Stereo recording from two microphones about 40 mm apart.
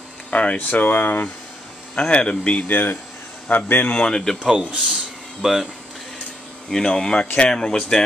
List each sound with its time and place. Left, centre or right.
0.3 s a sound: left
0.6 s speech: left
2.0 s speech: left
2.7 s speech: left
4.0 s speech: centre
4.6 s speech: right
5.4 s speech: centre
6.7 s speech: centre